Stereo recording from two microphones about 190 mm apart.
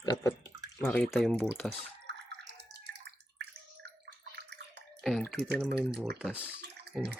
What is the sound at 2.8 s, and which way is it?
Bathtub, 60° right (ahead or behind).